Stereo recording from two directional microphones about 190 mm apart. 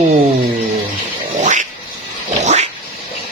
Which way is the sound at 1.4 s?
40° right (ahead or behind).